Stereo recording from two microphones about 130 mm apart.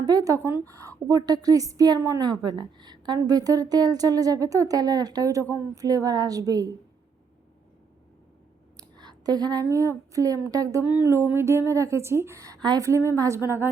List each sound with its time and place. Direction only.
0.0 s a woman's voice: 30° right (ahead or behind)
8.8 s a sound: 30° right (ahead or behind)
10.1 s a woman's voice: 25° right (ahead or behind)